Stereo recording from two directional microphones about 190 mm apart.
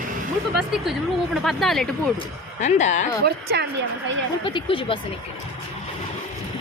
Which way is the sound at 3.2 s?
60° right (ahead or behind).